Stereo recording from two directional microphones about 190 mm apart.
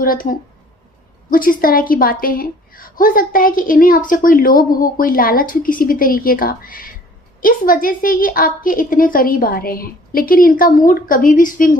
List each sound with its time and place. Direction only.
0.0 s a woman's voice: 50° left (ahead or behind)